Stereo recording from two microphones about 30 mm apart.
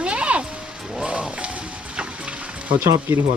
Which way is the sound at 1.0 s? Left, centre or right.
Right.